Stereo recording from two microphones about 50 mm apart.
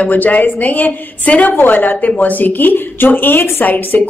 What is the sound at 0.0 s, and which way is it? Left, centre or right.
A woman's voice, left.